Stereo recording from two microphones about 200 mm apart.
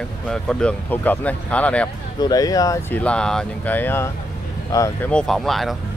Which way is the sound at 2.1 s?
20° left (ahead or behind).